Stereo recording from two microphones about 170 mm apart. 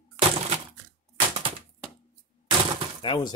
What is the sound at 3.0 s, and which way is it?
Speech, 30° left (ahead or behind).